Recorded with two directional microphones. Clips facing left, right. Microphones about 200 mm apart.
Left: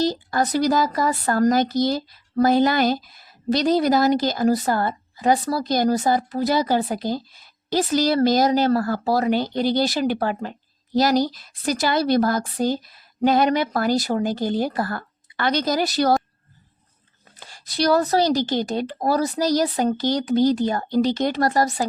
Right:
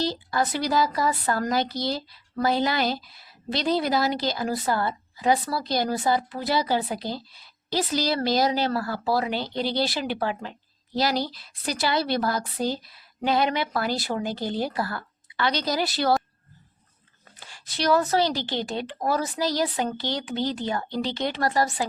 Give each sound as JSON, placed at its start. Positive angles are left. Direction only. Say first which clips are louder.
{"t": 0.0, "sound": "speech", "louder": "left 4 dB", "side_deg": 45}
{"t": 17.5, "sound": "speech", "louder": "left 3 dB", "side_deg": 40}